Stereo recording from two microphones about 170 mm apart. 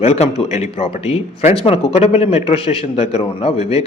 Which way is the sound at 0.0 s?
40° left (ahead or behind).